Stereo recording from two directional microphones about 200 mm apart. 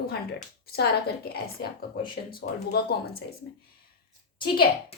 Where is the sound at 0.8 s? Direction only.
50° left (ahead or behind).